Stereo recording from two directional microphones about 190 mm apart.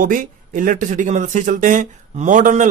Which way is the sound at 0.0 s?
45° right (ahead or behind).